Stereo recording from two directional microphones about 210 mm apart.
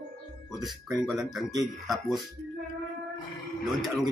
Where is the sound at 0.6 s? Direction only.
Centre (ahead or behind).